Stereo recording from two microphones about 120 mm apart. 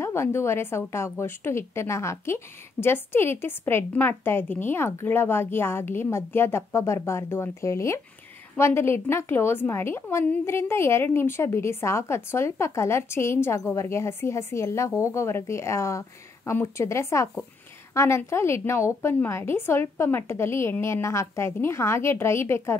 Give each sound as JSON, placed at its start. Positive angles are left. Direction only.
{"t": 0.0, "sound": "a woman's voice", "side_deg": 20}